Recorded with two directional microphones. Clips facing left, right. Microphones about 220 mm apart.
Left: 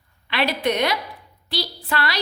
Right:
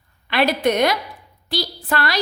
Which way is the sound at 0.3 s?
45° right (ahead or behind).